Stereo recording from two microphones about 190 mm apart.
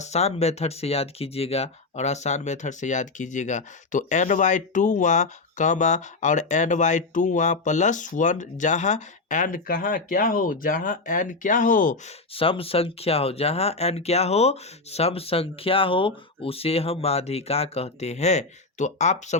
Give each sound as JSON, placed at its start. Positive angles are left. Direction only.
{"t": 0.0, "sound": "speech", "side_deg": 35}
{"t": 12.3, "sound": "speech", "side_deg": 30}